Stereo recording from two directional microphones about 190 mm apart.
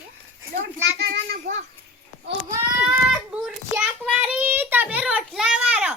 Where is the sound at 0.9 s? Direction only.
60° right (ahead or behind).